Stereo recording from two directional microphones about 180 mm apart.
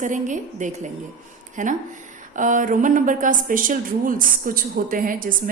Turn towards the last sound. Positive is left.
turn(degrees=-50)  # may be behind; listen again after turning